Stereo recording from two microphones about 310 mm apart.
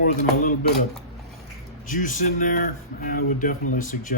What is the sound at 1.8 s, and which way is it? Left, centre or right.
Speech, left.